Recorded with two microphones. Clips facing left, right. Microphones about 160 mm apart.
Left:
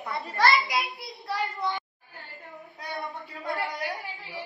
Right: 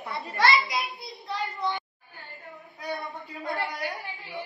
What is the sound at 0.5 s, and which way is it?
Speech, centre (ahead or behind).